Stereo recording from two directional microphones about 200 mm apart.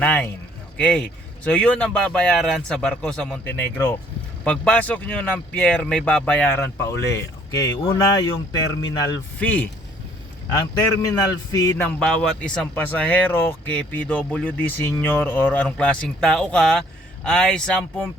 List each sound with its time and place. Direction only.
0.0 s a man's voice: 5° left (ahead or behind)
9.4 s speech: 10° left (ahead or behind)
11.5 s speech: 15° left (ahead or behind)